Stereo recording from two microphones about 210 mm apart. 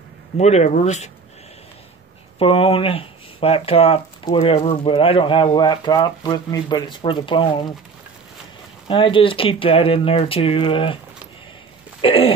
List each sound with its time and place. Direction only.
0.4 s speech: 30° left (ahead or behind)
2.3 s speech: 25° left (ahead or behind)
8.8 s speech: 25° left (ahead or behind)
12.0 s throat clearing: 25° left (ahead or behind)